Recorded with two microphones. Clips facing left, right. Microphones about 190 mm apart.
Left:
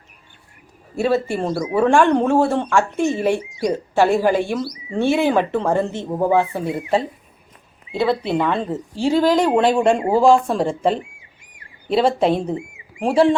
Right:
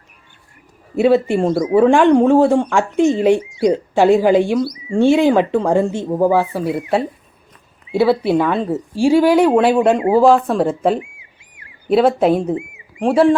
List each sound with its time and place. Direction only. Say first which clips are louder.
0.9 s speech: right 6 dB; 15° right (ahead or behind)
7.9 s speech: right 5 dB; 5° right (ahead or behind)